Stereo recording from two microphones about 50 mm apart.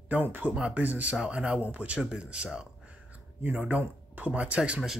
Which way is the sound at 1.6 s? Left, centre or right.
Right.